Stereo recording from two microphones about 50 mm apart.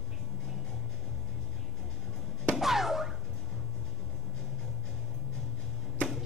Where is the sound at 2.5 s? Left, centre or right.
Centre.